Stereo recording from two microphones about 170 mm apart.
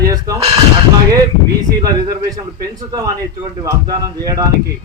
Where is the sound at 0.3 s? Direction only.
20° right (ahead or behind).